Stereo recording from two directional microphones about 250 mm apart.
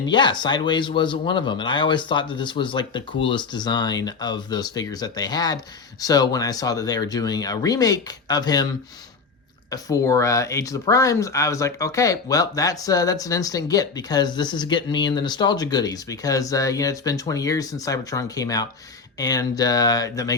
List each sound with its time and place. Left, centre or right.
0.0 s speech: centre
9.6 s speech: centre